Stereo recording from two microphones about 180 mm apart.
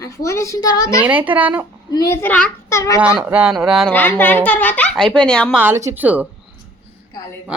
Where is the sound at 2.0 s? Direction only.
10° left (ahead or behind).